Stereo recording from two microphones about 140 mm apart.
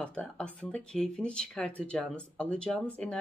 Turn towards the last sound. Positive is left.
turn(degrees=5)  # may be behind; listen again after turning